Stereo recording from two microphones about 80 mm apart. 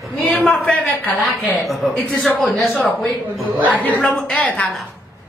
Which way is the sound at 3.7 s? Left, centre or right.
Centre.